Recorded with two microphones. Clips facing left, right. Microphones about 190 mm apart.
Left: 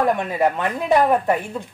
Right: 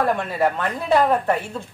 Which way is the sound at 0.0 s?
15° left (ahead or behind).